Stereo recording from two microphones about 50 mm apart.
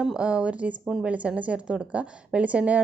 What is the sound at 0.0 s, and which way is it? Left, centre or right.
A woman's voice, centre.